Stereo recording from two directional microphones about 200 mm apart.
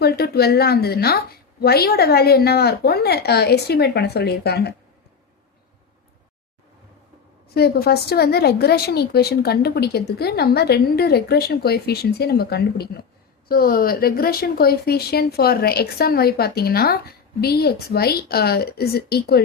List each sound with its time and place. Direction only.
0.0 s speech: 50° left (ahead or behind)
7.5 s speech: 50° left (ahead or behind)